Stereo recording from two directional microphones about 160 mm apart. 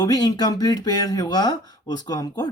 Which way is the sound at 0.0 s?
25° left (ahead or behind).